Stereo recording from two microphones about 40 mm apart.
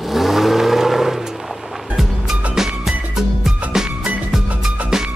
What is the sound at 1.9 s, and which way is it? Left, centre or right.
Music, centre.